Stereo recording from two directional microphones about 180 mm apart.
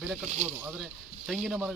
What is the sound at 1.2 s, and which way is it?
Speech, centre (ahead or behind).